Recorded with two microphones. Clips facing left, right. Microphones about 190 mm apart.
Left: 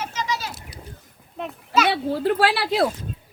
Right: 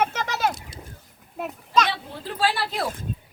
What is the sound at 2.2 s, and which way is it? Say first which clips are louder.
Speech: left 3 dB; 65° left (ahead or behind).